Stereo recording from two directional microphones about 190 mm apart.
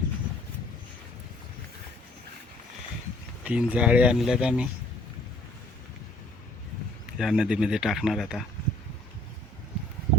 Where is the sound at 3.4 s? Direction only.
5° right (ahead or behind).